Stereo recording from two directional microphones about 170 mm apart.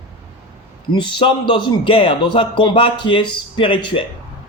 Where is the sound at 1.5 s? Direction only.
30° left (ahead or behind).